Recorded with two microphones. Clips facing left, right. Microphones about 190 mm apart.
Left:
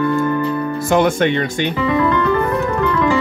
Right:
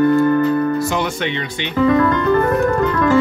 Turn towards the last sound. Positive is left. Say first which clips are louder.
# right 1 dB
turn(degrees=-45)  # may be behind; listen again after turning